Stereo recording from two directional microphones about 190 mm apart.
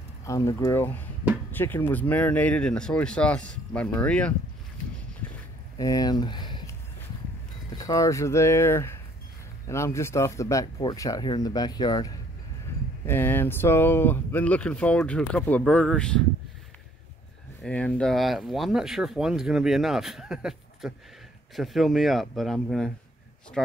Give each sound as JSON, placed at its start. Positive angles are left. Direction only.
{"t": 0.2, "sound": "speech", "side_deg": 15}
{"t": 5.8, "sound": "speech", "side_deg": 20}
{"t": 7.7, "sound": "speech", "side_deg": 20}
{"t": 17.6, "sound": "speech", "side_deg": 5}